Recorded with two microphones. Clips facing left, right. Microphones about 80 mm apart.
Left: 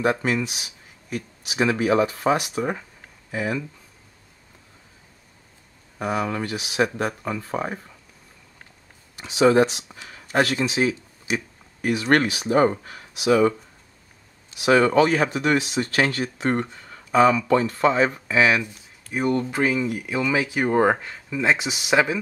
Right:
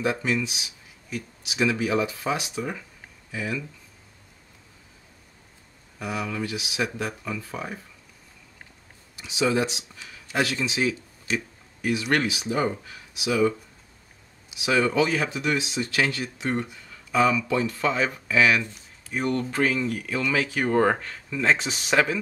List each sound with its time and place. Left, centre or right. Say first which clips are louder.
0.0 s speech: left 3 dB; left
5.9 s speech: left 5 dB; left
9.1 s a man's voice: left 7 dB; left
14.6 s speech: left 5 dB; left
19.1 s speech: left 3 dB; centre